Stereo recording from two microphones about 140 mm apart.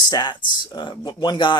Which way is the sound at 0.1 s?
30° left (ahead or behind).